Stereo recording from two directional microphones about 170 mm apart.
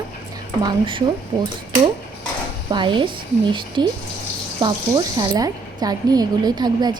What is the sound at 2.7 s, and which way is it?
Speech, 30° right (ahead or behind).